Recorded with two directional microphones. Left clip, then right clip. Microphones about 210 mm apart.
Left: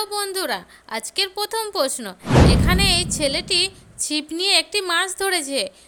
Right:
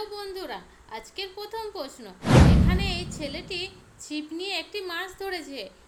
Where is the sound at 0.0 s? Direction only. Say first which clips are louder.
Left 10 dB; 50° left (ahead or behind).